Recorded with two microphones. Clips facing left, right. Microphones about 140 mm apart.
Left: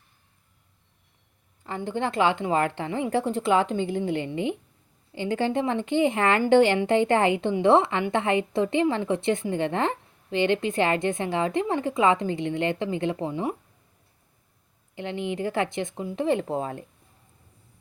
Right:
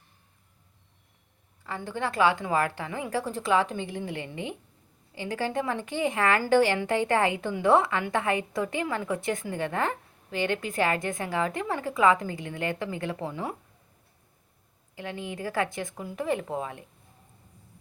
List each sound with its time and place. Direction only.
1.6 s a woman's voice: 25° left (ahead or behind)
14.9 s a woman's voice: 25° left (ahead or behind)